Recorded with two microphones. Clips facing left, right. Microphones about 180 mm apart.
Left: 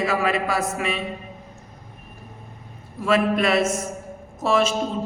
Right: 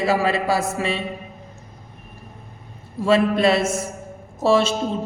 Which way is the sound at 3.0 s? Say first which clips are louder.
Right 3 dB; 30° right (ahead or behind).